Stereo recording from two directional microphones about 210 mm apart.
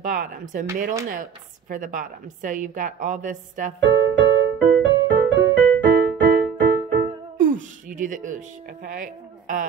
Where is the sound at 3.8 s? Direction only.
60° right (ahead or behind).